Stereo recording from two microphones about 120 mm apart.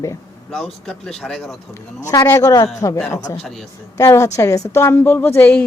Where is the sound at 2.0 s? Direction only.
25° left (ahead or behind).